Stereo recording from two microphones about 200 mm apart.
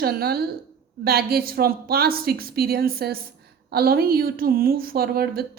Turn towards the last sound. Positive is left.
turn(degrees=-50)  # may be behind; listen again after turning